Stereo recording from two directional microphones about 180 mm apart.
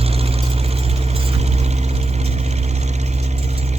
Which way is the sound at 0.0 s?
35° right (ahead or behind).